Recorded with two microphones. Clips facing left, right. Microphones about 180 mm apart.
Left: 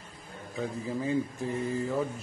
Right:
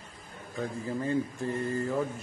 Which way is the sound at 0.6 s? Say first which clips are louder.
Even; centre (ahead or behind).